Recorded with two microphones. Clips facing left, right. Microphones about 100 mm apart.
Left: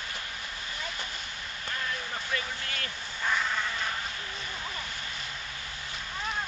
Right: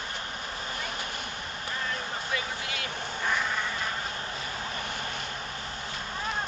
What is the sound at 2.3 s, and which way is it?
Vehicle, 10° right (ahead or behind).